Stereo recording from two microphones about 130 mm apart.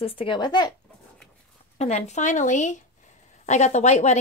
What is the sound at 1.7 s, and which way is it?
Speech, 60° left (ahead or behind).